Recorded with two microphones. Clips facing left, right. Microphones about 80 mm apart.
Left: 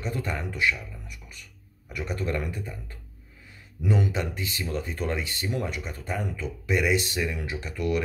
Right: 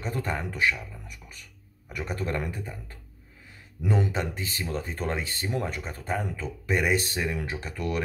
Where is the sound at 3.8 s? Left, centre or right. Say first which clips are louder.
Even; right.